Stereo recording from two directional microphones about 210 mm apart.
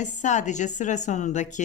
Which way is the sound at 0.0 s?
35° left (ahead or behind).